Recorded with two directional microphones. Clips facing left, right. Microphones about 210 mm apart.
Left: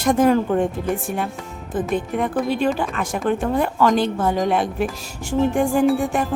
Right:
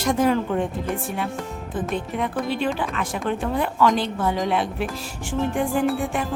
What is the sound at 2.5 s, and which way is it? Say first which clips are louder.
Speech: left 4 dB; 45° left (ahead or behind).